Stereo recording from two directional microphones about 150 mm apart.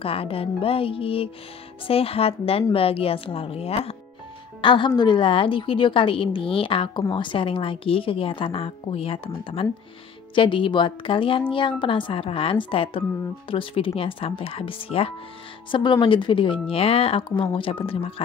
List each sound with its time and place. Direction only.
0.0 s a woman's voice: 40° left (ahead or behind)